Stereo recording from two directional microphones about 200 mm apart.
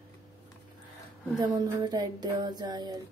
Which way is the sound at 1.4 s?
20° right (ahead or behind).